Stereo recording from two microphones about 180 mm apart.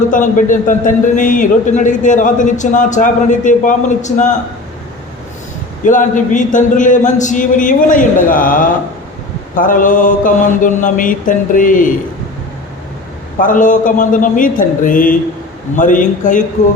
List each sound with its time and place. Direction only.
0.1 s a man's voice: 45° left (ahead or behind)
5.8 s a man's voice: 45° left (ahead or behind)
13.4 s a man's voice: 45° left (ahead or behind)